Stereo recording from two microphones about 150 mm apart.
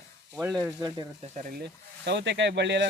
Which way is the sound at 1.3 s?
75° right (ahead or behind).